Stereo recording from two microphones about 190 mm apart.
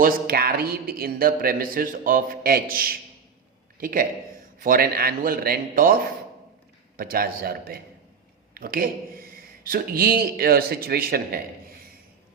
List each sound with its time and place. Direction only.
0.0 s a man's voice: 55° right (ahead or behind)